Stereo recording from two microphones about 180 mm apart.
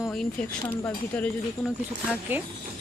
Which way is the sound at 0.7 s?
10° left (ahead or behind).